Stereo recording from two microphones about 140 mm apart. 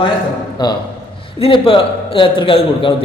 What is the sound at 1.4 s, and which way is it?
A man's voice, 40° left (ahead or behind).